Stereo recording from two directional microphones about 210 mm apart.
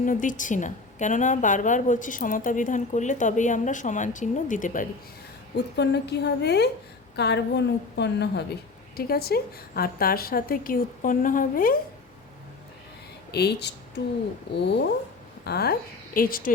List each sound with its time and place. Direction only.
0.0 s a woman's voice: 40° left (ahead or behind)
5.5 s a woman's voice: 55° left (ahead or behind)
13.3 s a woman's voice: 50° left (ahead or behind)
15.4 s a woman's voice: 50° left (ahead or behind)